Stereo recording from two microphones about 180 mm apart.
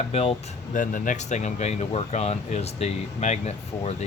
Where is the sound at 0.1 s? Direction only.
35° left (ahead or behind).